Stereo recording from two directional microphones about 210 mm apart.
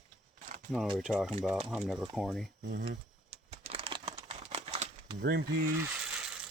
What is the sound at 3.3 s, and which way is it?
Typing, 30° right (ahead or behind).